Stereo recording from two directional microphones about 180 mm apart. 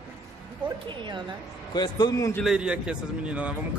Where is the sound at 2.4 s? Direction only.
5° right (ahead or behind).